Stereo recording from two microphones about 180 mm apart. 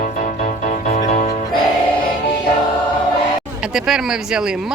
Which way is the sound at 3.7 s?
5° right (ahead or behind).